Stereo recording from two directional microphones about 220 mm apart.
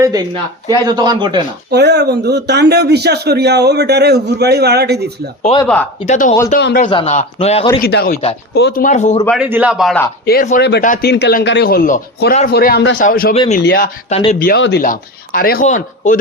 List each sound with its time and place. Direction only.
0.7 s speech: 20° right (ahead or behind)
1.7 s a man's voice: 50° right (ahead or behind)
5.6 s speech: 5° left (ahead or behind)
6.1 s speech: 35° left (ahead or behind)
6.6 s speech: 50° left (ahead or behind)
6.8 s a man's voice: 30° left (ahead or behind)
7.8 s speech: 45° left (ahead or behind)
9.4 s a man's voice: 5° right (ahead or behind)
10.2 s speech: 40° left (ahead or behind)
13.3 s a man's voice: 25° left (ahead or behind)
13.6 s speech: 45° left (ahead or behind)
14.1 s a man's voice: 30° left (ahead or behind)
14.3 s speech: 45° left (ahead or behind)